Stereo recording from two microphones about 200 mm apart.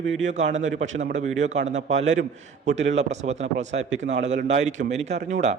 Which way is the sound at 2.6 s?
35° right (ahead or behind).